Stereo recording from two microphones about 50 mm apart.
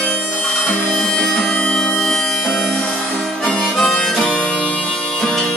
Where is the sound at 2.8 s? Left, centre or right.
Centre.